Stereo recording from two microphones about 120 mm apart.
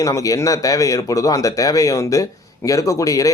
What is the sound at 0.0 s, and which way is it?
Speech, 30° left (ahead or behind).